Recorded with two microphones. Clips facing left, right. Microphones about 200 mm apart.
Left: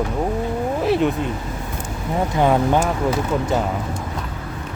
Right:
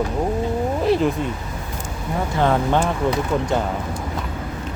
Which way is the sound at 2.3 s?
15° left (ahead or behind).